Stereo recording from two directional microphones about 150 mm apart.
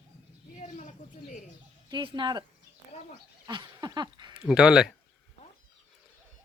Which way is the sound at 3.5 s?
30° right (ahead or behind).